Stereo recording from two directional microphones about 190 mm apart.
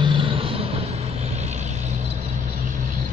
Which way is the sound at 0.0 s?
25° right (ahead or behind).